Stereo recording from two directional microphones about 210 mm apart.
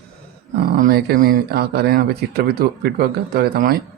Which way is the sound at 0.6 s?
45° right (ahead or behind).